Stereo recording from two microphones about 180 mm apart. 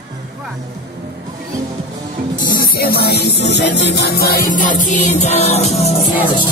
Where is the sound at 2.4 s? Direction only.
55° left (ahead or behind); by 5.8 s 35° left (ahead or behind).